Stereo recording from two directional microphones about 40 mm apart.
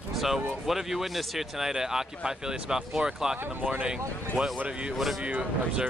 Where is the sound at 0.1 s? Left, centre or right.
Centre.